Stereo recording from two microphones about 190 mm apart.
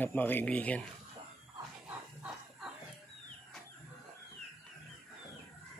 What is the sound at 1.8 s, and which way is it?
Chicken, 5° right (ahead or behind).